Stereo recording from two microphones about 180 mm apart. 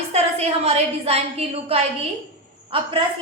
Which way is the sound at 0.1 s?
35° right (ahead or behind).